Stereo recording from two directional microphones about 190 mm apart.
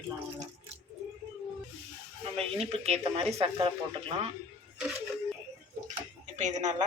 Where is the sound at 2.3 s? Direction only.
30° right (ahead or behind).